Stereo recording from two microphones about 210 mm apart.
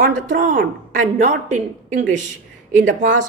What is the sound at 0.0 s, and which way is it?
A woman's voice, 40° right (ahead or behind).